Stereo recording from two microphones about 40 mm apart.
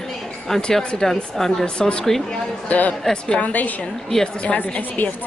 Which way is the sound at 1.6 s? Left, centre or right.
Left.